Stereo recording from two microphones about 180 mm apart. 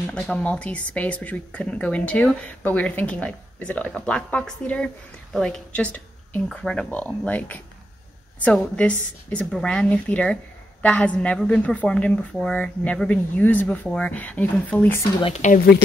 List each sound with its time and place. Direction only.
0.0 s speech: 5° left (ahead or behind)
15.2 s speech: 40° left (ahead or behind)